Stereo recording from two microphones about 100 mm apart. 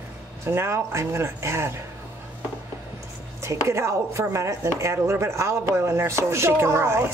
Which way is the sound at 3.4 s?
30° right (ahead or behind).